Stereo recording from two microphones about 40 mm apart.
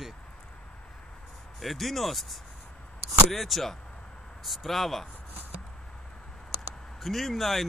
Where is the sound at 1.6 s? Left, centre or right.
Centre.